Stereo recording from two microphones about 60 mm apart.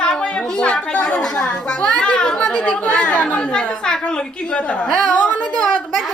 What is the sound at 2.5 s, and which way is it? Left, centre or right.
Chatter, centre.